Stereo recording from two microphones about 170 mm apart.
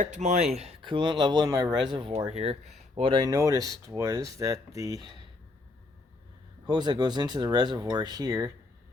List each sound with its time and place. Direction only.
0.0 s speech: 45° right (ahead or behind); by 4.9 s 20° right (ahead or behind)
6.7 s speech: 25° right (ahead or behind)